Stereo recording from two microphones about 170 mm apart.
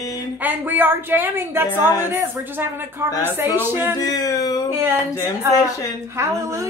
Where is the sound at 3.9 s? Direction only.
20° left (ahead or behind).